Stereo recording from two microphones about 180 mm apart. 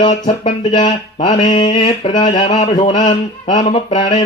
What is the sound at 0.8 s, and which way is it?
Mantra, 25° left (ahead or behind).